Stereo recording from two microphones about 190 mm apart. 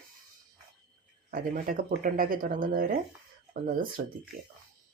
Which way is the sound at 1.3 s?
50° right (ahead or behind).